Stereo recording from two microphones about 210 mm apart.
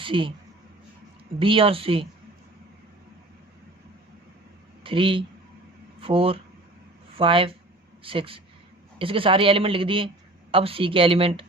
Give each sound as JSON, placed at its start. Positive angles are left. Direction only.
{"t": 0.0, "sound": "speech", "side_deg": -25}
{"t": 1.4, "sound": "speech", "side_deg": -25}
{"t": 4.8, "sound": "speech", "side_deg": -25}